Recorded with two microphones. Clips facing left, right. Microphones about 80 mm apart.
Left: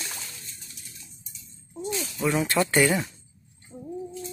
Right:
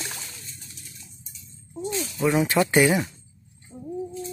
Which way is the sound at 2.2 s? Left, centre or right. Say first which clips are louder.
Right 3 dB; centre.